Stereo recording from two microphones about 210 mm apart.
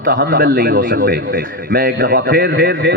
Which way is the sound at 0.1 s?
40° right (ahead or behind).